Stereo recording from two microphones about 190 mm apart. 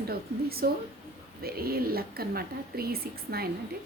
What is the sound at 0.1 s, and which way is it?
Speech, 55° right (ahead or behind).